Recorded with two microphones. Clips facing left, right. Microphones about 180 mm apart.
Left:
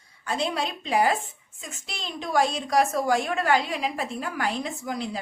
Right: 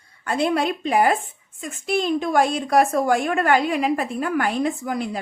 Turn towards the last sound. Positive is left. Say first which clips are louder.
# right 5 dB
turn(degrees=-55)  # may be behind; listen again after turning